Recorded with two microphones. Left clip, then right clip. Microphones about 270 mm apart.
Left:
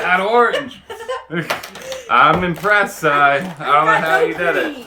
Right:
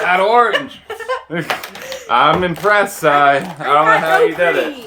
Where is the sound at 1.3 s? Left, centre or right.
Right.